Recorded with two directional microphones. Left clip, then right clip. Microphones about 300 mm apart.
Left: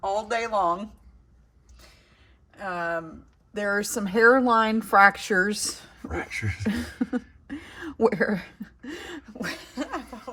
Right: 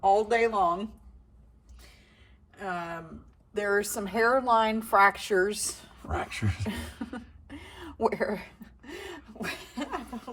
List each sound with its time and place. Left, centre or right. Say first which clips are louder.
0.3 s a woman's voice: even; left
2.6 s a woman's voice: left 6 dB; left
6.1 s speech: left 2 dB; centre
6.7 s a sound: left 8 dB; left